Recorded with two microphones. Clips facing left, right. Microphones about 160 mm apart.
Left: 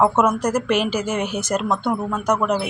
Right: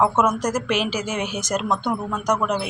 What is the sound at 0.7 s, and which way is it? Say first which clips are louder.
Speech: left 3 dB; 50° left (ahead or behind).